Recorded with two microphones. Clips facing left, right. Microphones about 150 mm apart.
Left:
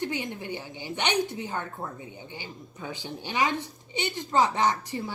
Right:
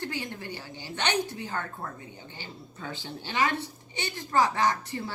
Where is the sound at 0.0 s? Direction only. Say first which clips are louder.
Left 3 dB; 20° left (ahead or behind).